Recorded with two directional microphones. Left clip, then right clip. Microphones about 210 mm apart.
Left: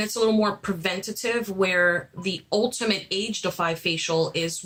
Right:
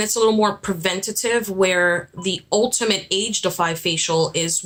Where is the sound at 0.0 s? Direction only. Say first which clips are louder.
Right 5 dB; 35° right (ahead or behind).